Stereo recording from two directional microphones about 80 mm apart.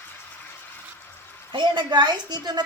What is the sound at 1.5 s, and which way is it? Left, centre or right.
A woman's voice, right.